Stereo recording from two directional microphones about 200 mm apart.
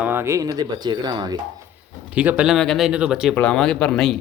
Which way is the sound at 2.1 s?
5° right (ahead or behind).